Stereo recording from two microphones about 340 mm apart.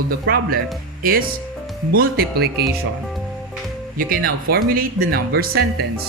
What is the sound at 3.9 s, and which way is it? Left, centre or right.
Speech, right.